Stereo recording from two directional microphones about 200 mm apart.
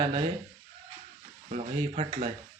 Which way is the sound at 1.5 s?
30° right (ahead or behind).